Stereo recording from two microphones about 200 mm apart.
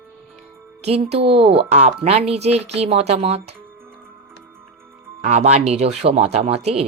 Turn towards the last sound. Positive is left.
turn(degrees=-30)  # may be behind; listen again after turning